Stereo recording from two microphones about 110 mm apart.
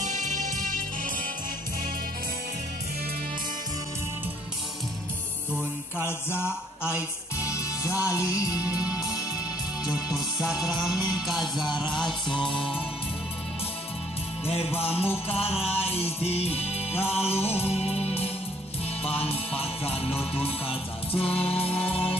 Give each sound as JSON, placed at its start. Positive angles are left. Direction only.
{"t": 0.0, "sound": "music", "side_deg": -90}
{"t": 5.5, "sound": "mantra", "side_deg": -15}
{"t": 6.0, "sound": "mantra", "side_deg": 20}
{"t": 6.9, "sound": "music", "side_deg": -10}
{"t": 7.4, "sound": "music", "side_deg": 30}
{"t": 10.1, "sound": "music", "side_deg": 0}
{"t": 14.4, "sound": "music", "side_deg": 65}